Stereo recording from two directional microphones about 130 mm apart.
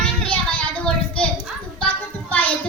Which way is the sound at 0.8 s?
10° left (ahead or behind).